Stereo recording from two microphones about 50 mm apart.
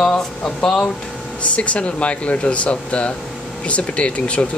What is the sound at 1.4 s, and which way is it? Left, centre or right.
Speech, left.